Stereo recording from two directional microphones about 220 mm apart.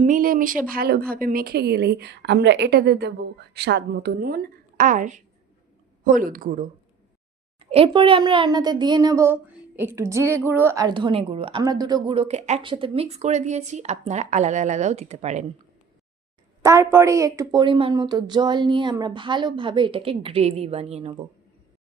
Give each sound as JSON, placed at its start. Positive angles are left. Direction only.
{"t": 0.0, "sound": "a woman's voice", "side_deg": -40}
{"t": 7.6, "sound": "a child's voice", "side_deg": -25}
{"t": 16.6, "sound": "a child's voice", "side_deg": -15}